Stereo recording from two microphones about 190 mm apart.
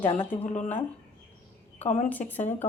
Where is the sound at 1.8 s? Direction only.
40° left (ahead or behind).